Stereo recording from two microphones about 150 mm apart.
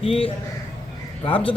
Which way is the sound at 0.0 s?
40° left (ahead or behind).